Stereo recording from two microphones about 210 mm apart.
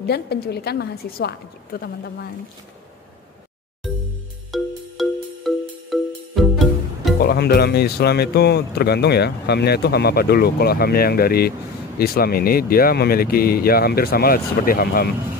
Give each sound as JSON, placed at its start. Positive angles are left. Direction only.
{"t": 0.0, "sound": "speech", "side_deg": 50}
{"t": 4.5, "sound": "music", "side_deg": 0}
{"t": 7.2, "sound": "speech", "side_deg": 45}